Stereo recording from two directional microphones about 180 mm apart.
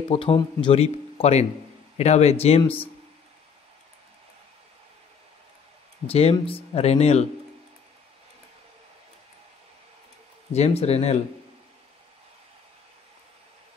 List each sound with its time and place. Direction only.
0.1 s speech: 30° left (ahead or behind)
6.0 s speech: 35° left (ahead or behind)
10.5 s speech: 35° left (ahead or behind)